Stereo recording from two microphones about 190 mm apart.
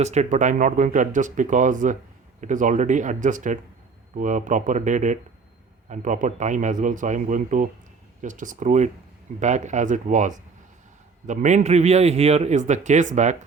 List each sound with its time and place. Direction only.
0.0 s speech: 35° right (ahead or behind)